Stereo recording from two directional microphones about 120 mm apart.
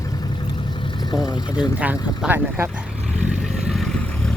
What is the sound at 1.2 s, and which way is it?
Speech, 35° left (ahead or behind).